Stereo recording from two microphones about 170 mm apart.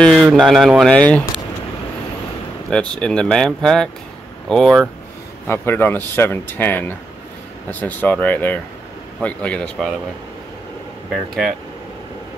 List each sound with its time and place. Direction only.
0.0 s speech: centre (ahead or behind)
2.7 s speech: 5° left (ahead or behind)
5.5 s speech: 15° left (ahead or behind)
11.1 s speech: centre (ahead or behind)